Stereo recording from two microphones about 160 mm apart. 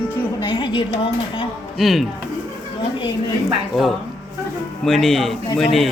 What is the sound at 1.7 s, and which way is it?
Speech, centre (ahead or behind).